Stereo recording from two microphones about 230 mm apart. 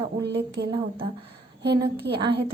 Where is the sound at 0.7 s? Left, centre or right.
Right.